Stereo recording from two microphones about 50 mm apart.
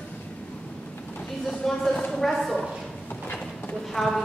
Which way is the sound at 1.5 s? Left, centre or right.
Centre.